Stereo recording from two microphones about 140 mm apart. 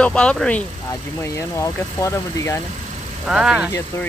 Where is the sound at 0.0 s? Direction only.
10° left (ahead or behind).